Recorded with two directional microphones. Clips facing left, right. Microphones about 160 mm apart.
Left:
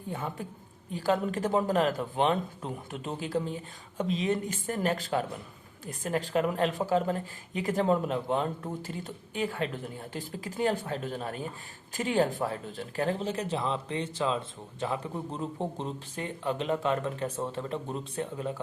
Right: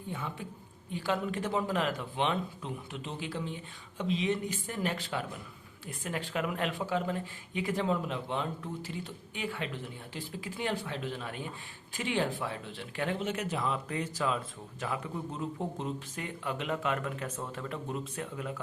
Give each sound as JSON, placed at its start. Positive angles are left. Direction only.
{"t": 0.1, "sound": "speech", "side_deg": 45}